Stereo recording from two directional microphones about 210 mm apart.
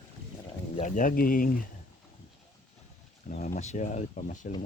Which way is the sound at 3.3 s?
35° left (ahead or behind).